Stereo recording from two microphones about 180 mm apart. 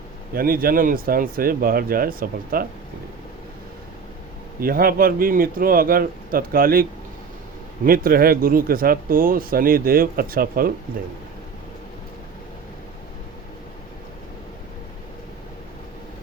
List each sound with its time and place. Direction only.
0.3 s speech: 55° right (ahead or behind)
4.6 s speech: 55° right (ahead or behind)
7.9 s speech: 55° right (ahead or behind)